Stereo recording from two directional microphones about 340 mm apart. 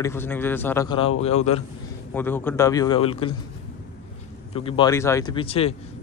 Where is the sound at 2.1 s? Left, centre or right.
Centre.